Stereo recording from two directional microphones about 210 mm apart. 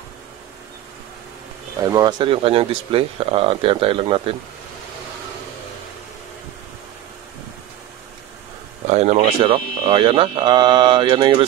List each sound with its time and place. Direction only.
1.8 s speech: 15° right (ahead or behind)
8.8 s speech: 30° right (ahead or behind)